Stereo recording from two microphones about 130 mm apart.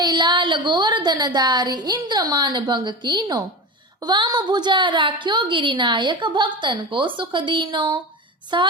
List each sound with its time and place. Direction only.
0.0 s a woman's voice: 35° right (ahead or behind)